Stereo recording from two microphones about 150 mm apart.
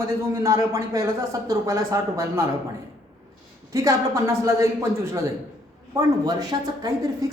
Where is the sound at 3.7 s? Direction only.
20° right (ahead or behind).